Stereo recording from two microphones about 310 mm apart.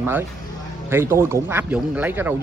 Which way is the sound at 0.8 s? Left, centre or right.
Centre.